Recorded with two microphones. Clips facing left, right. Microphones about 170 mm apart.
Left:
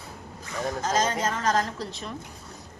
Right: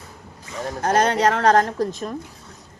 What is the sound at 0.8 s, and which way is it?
Speech, 60° right (ahead or behind).